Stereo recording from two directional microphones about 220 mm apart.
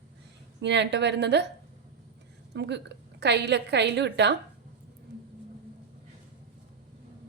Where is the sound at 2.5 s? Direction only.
50° right (ahead or behind).